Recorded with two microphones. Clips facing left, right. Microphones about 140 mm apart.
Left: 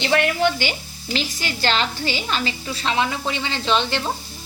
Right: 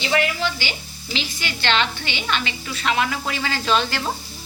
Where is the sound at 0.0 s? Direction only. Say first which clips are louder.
Left 3 dB; 55° left (ahead or behind); by 4.0 s 25° left (ahead or behind).